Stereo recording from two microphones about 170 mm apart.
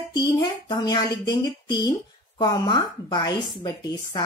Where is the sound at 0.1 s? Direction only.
25° left (ahead or behind).